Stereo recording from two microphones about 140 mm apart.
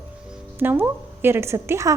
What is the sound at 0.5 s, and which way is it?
A woman's voice, 15° right (ahead or behind).